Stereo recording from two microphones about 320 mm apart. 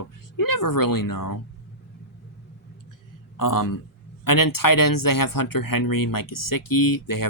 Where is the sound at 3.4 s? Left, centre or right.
Left.